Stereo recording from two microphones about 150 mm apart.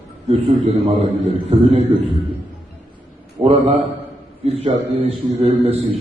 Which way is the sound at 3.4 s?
40° right (ahead or behind).